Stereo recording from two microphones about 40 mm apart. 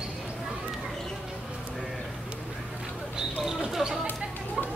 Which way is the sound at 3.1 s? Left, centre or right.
Centre.